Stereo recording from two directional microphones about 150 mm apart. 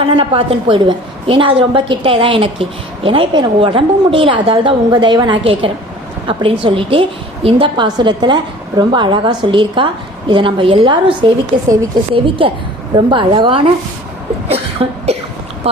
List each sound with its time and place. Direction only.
0.0 s a woman's voice: 35° right (ahead or behind)
12.4 s a woman's voice: 35° right (ahead or behind)
14.4 s cough: 45° right (ahead or behind)
15.6 s a woman's voice: 40° right (ahead or behind)